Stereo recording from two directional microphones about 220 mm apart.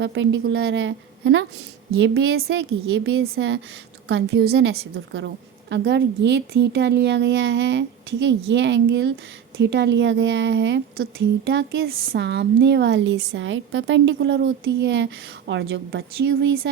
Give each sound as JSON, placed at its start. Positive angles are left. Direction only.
{"t": 0.0, "sound": "a woman's voice", "side_deg": -55}